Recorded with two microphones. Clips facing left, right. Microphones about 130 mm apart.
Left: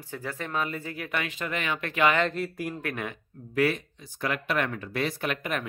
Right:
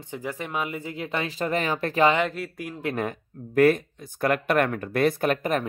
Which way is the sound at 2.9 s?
45° right (ahead or behind).